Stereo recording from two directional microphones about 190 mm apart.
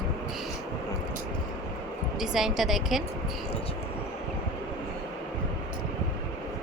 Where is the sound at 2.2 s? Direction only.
Centre (ahead or behind).